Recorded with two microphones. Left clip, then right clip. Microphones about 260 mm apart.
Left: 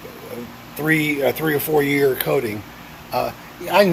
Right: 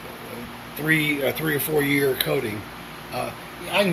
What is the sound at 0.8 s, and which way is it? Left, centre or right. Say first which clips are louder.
Speech: left 3 dB; centre.